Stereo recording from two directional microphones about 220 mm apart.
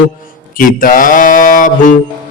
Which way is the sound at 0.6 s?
40° left (ahead or behind).